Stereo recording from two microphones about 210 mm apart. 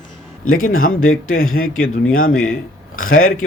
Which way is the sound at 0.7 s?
80° left.